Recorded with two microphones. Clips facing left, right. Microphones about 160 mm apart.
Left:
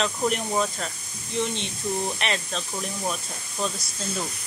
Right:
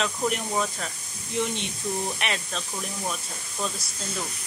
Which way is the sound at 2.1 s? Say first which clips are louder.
Left 2 dB; 5° right (ahead or behind).